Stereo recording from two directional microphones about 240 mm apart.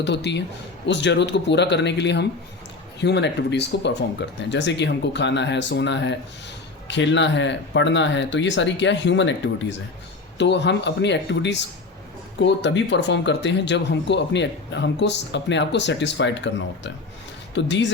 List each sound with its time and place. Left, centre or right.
0.0 s speech: left